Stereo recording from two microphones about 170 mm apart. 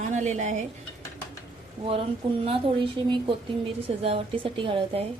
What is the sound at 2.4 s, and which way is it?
A woman's voice, 35° right (ahead or behind).